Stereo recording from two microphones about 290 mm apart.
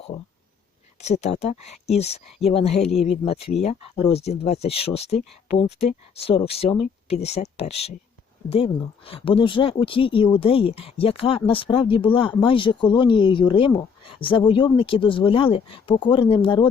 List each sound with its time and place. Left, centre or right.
1.0 s speech: left